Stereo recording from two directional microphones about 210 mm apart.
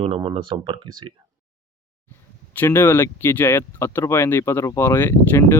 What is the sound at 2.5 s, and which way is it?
Speech, 10° left (ahead or behind).